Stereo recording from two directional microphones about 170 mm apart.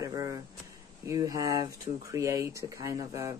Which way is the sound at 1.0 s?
20° right (ahead or behind).